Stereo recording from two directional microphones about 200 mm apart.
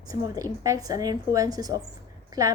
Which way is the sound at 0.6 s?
15° right (ahead or behind).